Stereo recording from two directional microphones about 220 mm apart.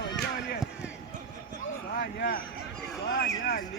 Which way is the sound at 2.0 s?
40° left (ahead or behind).